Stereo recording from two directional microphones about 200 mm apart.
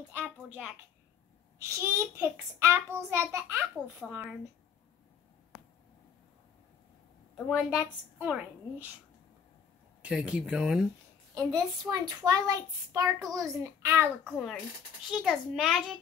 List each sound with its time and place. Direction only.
0.1 s a child's voice: 5° right (ahead or behind)
1.6 s a child's voice: 15° right (ahead or behind)
7.3 s a woman's voice: centre (ahead or behind)
10.0 s a woman's voice: 5° right (ahead or behind)
11.3 s a child's voice: 20° right (ahead or behind); by 16.0 s centre (ahead or behind)